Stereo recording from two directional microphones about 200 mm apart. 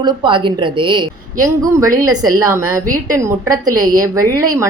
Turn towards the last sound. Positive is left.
turn(degrees=-15)  # may be behind; listen again after turning